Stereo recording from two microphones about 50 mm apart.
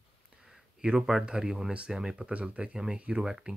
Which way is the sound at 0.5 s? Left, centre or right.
Centre.